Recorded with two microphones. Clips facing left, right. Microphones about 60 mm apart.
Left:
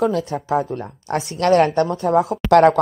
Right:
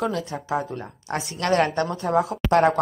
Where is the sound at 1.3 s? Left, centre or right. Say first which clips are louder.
Left 6 dB; left.